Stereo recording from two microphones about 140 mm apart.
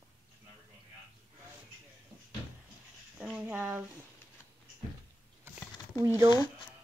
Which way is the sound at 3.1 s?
5° right (ahead or behind).